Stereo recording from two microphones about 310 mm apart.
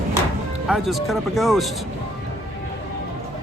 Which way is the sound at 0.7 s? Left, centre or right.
Centre.